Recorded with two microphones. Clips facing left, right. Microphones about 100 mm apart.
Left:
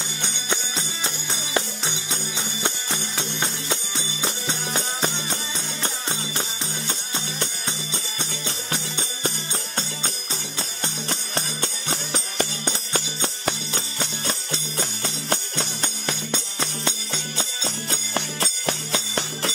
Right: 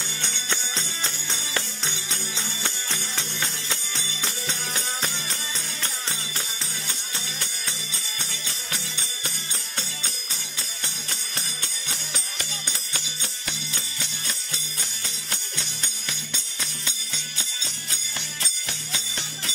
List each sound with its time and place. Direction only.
0.2 s music: 15° left (ahead or behind)
10.8 s music: 35° left (ahead or behind); by 19.5 s 55° left (ahead or behind)